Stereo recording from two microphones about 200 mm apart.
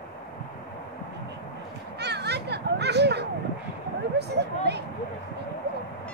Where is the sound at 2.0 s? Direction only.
55° right (ahead or behind).